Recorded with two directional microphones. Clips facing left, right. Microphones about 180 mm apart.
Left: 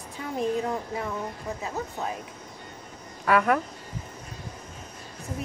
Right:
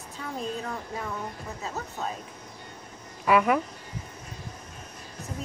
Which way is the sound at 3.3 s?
5° right (ahead or behind).